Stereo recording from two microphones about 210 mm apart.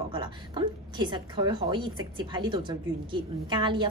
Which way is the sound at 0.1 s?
20° right (ahead or behind).